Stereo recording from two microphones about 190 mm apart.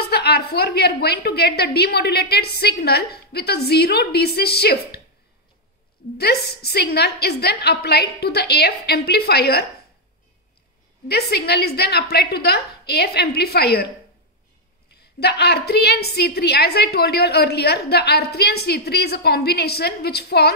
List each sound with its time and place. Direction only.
0.1 s a woman's voice: 55° left (ahead or behind)
6.1 s a woman's voice: 55° left (ahead or behind)
11.1 s a woman's voice: 60° left (ahead or behind)
15.1 s a woman's voice: 60° left (ahead or behind)